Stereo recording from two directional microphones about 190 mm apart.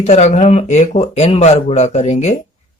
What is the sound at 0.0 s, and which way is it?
Speech, 35° left (ahead or behind).